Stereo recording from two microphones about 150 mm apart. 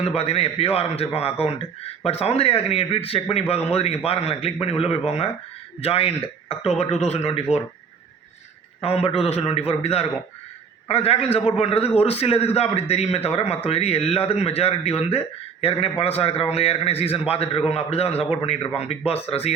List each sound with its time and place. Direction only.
0.1 s a man's voice: 45° left (ahead or behind)
8.8 s a man's voice: 40° left (ahead or behind)